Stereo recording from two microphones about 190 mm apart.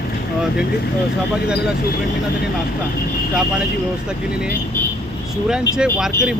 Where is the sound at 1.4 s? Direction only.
5° right (ahead or behind).